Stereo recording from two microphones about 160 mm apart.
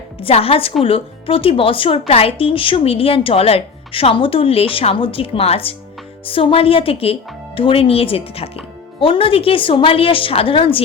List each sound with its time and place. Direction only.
0.2 s speech: 35° left (ahead or behind)